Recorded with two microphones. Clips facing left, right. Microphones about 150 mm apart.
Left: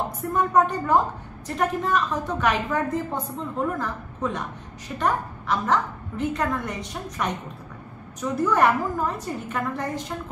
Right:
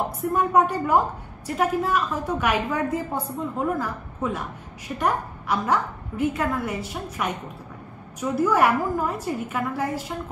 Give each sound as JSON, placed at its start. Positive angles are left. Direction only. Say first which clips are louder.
{"t": 0.3, "sound": "a woman's voice", "louder": "even", "side_deg": -10}